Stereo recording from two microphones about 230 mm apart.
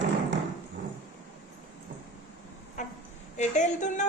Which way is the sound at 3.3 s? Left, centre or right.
Left.